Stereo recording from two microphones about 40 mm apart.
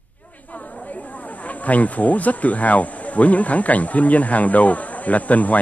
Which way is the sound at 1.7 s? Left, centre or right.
Left.